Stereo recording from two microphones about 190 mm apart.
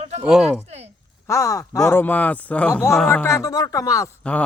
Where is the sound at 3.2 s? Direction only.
15° left (ahead or behind).